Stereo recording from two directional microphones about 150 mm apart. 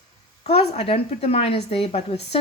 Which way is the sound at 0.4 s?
45° left (ahead or behind).